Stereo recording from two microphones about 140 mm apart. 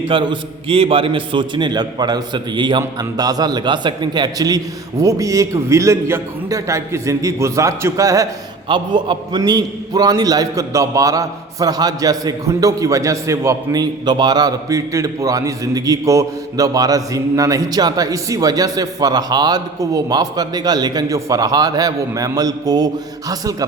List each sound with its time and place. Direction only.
0.0 s a man's voice: 35° right (ahead or behind)
8.6 s a man's voice: 35° right (ahead or behind)